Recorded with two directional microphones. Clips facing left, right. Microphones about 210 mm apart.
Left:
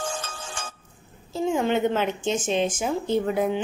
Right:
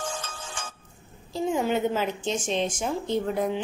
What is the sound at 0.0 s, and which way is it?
Music, 30° left (ahead or behind).